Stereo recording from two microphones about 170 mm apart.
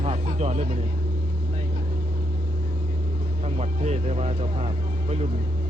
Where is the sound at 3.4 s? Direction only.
40° right (ahead or behind).